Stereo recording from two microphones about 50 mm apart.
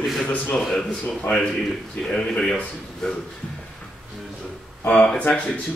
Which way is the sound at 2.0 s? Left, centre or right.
Centre.